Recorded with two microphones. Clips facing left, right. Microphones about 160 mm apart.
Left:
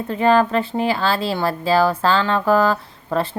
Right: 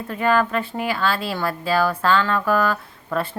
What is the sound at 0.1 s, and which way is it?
A woman's voice, 30° left (ahead or behind).